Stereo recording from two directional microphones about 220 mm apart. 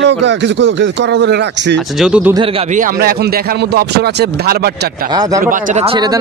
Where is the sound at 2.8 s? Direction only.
45° right (ahead or behind).